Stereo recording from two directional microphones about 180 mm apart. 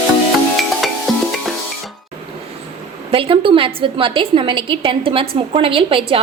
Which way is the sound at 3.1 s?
30° right (ahead or behind).